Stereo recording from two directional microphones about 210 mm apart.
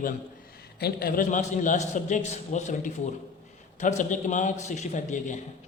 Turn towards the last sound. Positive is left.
turn(degrees=35)  # may be behind; listen again after turning